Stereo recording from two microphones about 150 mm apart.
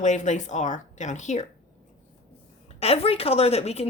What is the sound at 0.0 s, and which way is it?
A woman's voice, 50° left (ahead or behind).